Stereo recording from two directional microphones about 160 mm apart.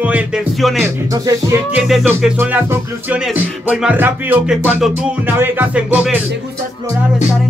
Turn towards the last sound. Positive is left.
turn(degrees=-10)  # may be behind; listen again after turning